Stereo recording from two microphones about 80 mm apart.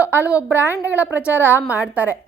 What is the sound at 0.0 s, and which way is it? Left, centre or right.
A woman's voice, right.